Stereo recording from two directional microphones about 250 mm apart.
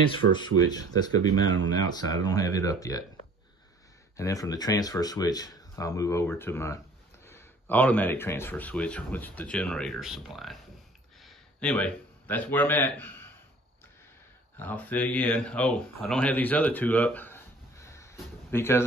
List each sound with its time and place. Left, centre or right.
0.2 s speech: right
0.6 s speech: centre
4.2 s speech: centre
14.6 s speech: centre